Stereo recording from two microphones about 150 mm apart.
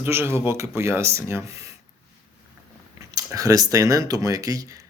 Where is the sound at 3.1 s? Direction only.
25° right (ahead or behind).